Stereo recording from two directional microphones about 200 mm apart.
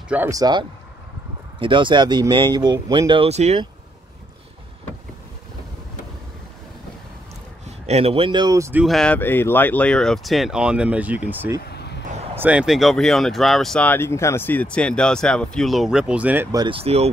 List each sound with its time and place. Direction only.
0.1 s speech: 15° right (ahead or behind); by 3.6 s 35° right (ahead or behind)
7.6 s speech: 30° right (ahead or behind); by 8.8 s 15° right (ahead or behind)
8.8 s speech: 5° left (ahead or behind)
11.6 s vehicle: 55° left (ahead or behind)
12.4 s speech: 5° right (ahead or behind)
16.5 s speech: 25° right (ahead or behind)